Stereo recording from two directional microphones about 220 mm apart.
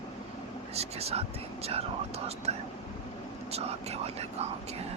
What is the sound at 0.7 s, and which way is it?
Whispering, 30° right (ahead or behind).